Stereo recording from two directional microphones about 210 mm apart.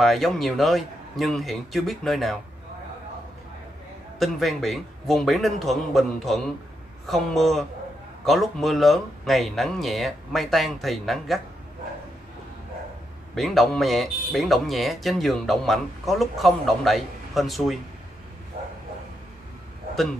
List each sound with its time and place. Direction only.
0.0 s speech: centre (ahead or behind)
4.2 s speech: centre (ahead or behind)
13.3 s speech: centre (ahead or behind)
18.6 s bow-wow: 30° right (ahead or behind)